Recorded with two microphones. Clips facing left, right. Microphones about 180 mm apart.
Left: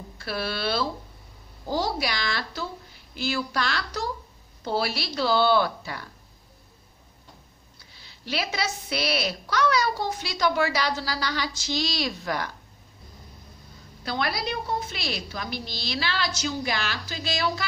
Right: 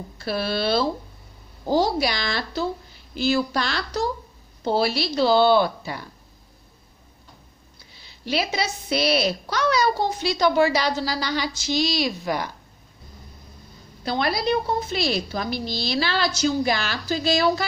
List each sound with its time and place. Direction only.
0.2 s a child's voice: 25° right (ahead or behind)
8.0 s a child's voice: 20° right (ahead or behind)
14.0 s a woman's voice: 25° right (ahead or behind)